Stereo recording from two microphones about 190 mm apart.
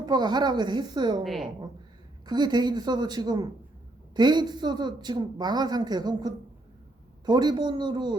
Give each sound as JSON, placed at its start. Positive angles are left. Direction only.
{"t": 0.0, "sound": "speech", "side_deg": -20}
{"t": 1.2, "sound": "a woman's voice", "side_deg": 0}
{"t": 2.2, "sound": "speech", "side_deg": -20}